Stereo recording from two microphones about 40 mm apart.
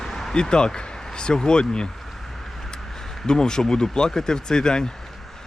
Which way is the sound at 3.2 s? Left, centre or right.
Centre.